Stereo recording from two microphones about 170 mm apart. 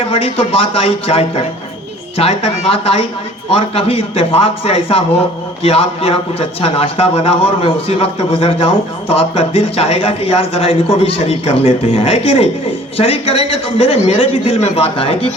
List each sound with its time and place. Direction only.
0.1 s a man's voice: 35° left (ahead or behind)